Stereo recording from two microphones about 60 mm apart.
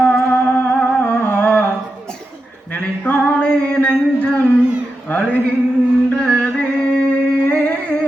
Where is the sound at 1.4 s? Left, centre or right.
Left.